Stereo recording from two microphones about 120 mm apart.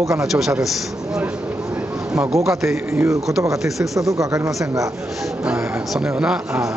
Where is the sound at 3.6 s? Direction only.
Centre (ahead or behind).